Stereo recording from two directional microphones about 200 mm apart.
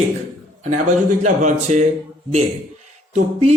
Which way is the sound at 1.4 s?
40° right (ahead or behind).